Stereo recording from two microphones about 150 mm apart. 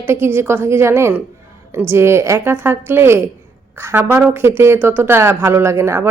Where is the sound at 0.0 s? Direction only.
15° right (ahead or behind).